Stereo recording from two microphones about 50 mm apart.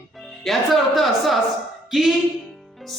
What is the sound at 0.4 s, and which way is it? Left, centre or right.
A woman's voice, centre.